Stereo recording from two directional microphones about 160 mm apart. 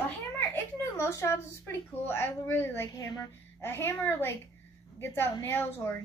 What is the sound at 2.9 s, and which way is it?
A woman's voice, 25° left (ahead or behind).